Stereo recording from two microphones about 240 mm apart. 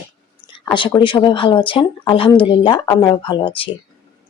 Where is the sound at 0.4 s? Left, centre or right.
Centre.